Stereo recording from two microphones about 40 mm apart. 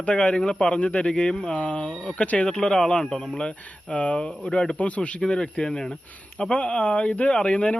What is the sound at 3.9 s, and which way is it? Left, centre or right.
A man's voice, left.